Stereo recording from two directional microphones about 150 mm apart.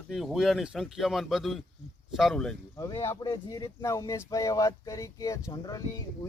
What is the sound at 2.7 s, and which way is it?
Speech, 20° left (ahead or behind).